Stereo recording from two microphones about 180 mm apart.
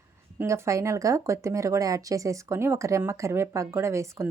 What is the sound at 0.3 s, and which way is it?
Speech, 15° right (ahead or behind).